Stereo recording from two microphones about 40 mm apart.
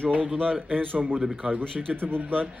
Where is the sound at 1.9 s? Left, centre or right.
Right.